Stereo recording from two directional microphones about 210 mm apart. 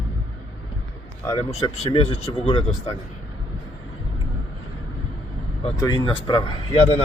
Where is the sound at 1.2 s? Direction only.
25° left (ahead or behind).